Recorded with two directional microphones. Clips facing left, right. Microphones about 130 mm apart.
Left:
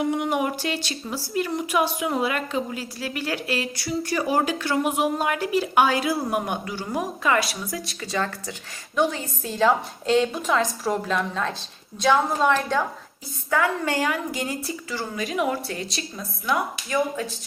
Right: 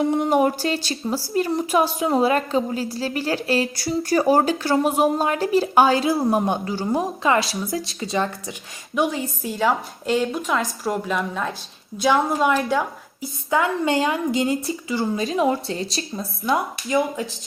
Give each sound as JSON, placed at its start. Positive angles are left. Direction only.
{"t": 0.0, "sound": "a woman's voice", "side_deg": -35}
{"t": 9.4, "sound": "a woman's voice", "side_deg": -5}
{"t": 12.2, "sound": "a woman's voice", "side_deg": -5}
{"t": 13.5, "sound": "a woman's voice", "side_deg": -20}